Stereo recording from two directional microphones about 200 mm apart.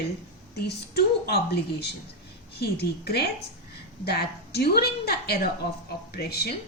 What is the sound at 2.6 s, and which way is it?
A woman's voice, 55° left (ahead or behind).